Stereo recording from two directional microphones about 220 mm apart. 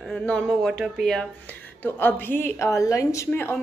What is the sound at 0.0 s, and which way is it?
A woman's voice, 5° left (ahead or behind).